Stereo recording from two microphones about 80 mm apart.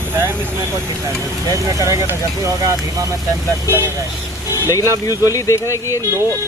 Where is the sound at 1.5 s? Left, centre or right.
Right.